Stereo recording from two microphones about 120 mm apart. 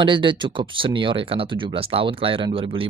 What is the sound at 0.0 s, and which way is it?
Speech, 45° right (ahead or behind).